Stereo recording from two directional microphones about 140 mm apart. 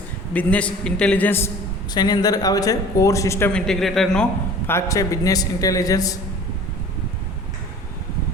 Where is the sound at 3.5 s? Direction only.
5° left (ahead or behind).